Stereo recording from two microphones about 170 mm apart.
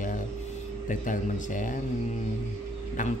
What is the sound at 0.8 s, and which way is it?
Speech, 50° left (ahead or behind).